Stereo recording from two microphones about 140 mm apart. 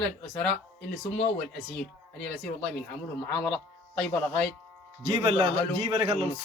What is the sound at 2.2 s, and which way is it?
Speech, 5° left (ahead or behind).